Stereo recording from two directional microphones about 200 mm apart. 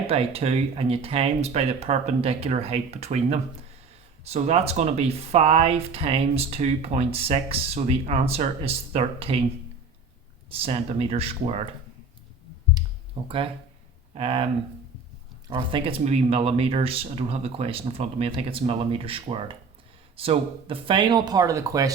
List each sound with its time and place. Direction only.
0.1 s speech: 30° right (ahead or behind)
10.5 s speech: 30° right (ahead or behind)
13.2 s speech: 25° right (ahead or behind)
15.4 s speech: 25° right (ahead or behind)